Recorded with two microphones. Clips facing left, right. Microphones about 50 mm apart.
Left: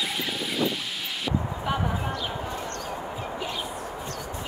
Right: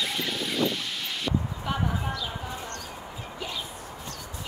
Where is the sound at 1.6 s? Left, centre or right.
Centre.